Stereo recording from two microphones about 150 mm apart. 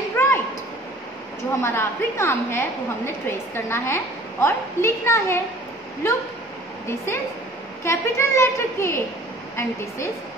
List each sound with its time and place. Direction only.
0.2 s a sound: 15° left (ahead or behind)
1.6 s a woman's voice: 15° left (ahead or behind)
7.8 s a woman's voice: 20° left (ahead or behind)